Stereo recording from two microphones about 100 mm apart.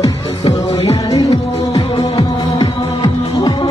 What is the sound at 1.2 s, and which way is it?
Music, 70° left (ahead or behind).